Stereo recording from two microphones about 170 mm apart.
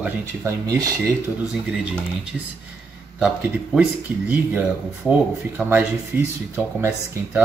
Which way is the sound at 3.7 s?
10° right (ahead or behind).